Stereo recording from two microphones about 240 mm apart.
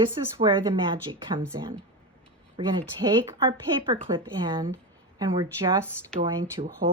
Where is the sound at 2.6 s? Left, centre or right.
Centre.